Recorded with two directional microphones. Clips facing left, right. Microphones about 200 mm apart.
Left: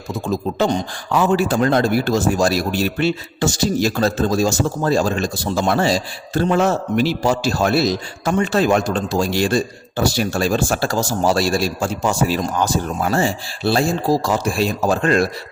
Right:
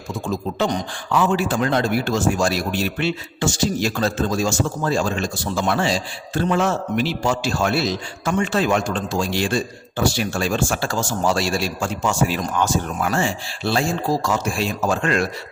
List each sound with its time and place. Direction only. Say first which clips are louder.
1.1 s a man's voice: left 3 dB; 40° left (ahead or behind)